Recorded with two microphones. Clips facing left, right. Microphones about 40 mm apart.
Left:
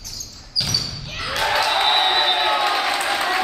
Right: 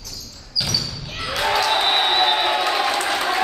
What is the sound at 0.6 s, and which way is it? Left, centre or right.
Basketball bounce, centre.